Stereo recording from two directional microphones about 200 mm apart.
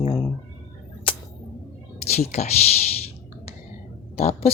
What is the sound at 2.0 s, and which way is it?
Speech, 35° left (ahead or behind).